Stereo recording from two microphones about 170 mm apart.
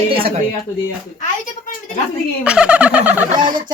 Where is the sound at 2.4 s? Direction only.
5° right (ahead or behind).